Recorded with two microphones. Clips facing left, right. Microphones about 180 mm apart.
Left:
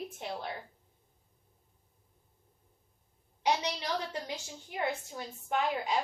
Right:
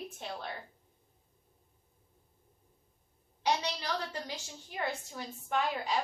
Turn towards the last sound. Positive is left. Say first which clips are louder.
# left 1 dB
turn(degrees=15)  # may be behind; listen again after turning